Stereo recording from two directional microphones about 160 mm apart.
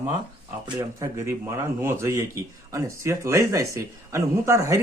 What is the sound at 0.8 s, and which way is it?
Speech, 20° right (ahead or behind).